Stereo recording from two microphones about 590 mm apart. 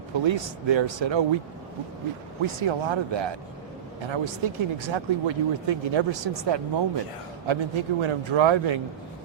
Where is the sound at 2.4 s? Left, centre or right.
Right.